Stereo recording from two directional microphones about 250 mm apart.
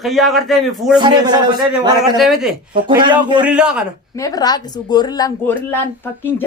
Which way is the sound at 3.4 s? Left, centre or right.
Centre.